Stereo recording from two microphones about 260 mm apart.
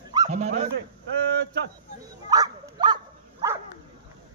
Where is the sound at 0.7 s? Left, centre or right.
Right.